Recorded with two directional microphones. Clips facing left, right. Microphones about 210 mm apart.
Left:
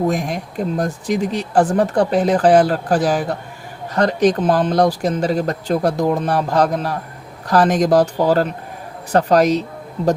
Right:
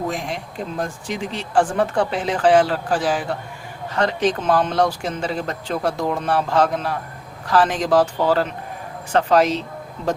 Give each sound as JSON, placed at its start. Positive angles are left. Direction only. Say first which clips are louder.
{"t": 0.1, "sound": "speech", "louder": "left 6 dB", "side_deg": 45}